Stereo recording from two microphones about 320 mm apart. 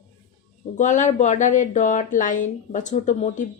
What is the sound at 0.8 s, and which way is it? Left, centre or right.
Speech, left.